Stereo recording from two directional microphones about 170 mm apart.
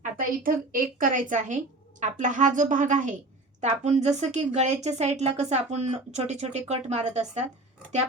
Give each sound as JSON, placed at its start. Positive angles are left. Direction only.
{"t": 0.2, "sound": "speech", "side_deg": -55}